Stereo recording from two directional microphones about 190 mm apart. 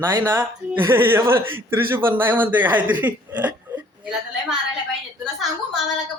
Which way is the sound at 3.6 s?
5° right (ahead or behind).